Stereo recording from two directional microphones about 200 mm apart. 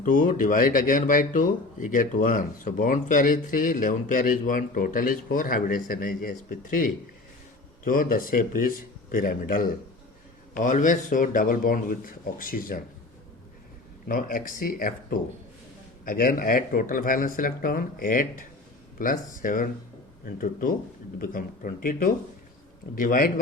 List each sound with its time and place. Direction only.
0.0 s speech: 45° left (ahead or behind)
14.1 s speech: 45° left (ahead or behind)